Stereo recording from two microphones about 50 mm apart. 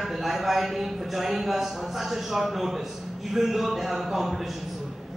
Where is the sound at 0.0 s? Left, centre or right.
Centre.